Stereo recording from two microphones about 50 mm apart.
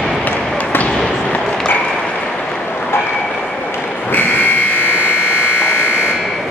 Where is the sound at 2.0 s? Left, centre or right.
Centre.